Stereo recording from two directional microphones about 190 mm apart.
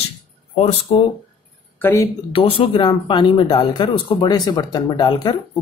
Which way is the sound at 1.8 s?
15° left (ahead or behind).